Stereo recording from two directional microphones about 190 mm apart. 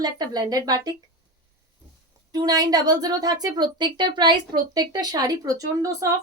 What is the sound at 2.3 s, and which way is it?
A woman's voice, 20° right (ahead or behind).